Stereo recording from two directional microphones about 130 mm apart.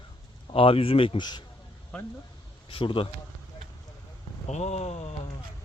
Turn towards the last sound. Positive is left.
turn(degrees=55)  # may be behind; listen again after turning